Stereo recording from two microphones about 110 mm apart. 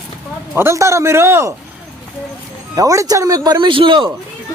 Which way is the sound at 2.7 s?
30° right (ahead or behind).